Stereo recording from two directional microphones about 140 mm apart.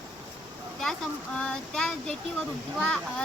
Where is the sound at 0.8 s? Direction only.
Centre (ahead or behind).